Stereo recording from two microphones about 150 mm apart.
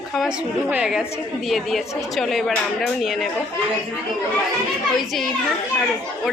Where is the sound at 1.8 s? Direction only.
20° left (ahead or behind).